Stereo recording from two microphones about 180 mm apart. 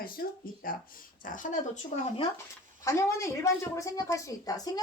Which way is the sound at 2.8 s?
15° left (ahead or behind).